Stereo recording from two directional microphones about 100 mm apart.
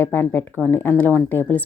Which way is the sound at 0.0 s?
20° left (ahead or behind).